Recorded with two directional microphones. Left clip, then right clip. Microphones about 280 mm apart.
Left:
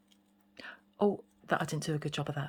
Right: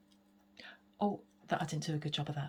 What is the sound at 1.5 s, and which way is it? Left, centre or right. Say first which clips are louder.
Speech: left 4 dB; centre.